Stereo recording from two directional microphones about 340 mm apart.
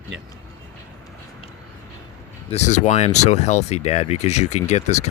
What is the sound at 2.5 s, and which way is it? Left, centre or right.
Speech, centre.